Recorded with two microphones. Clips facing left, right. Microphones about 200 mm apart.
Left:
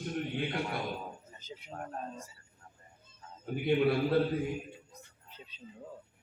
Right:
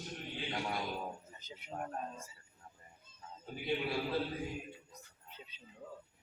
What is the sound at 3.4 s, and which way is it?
Speech, 55° left (ahead or behind).